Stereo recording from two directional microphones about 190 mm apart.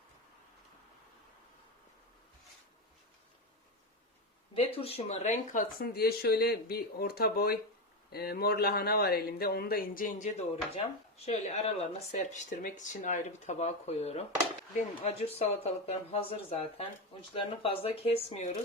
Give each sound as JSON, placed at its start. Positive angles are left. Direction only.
{"t": 4.5, "sound": "speech", "side_deg": 30}
{"t": 5.8, "sound": "speech", "side_deg": 55}
{"t": 10.5, "sound": "speech", "side_deg": 30}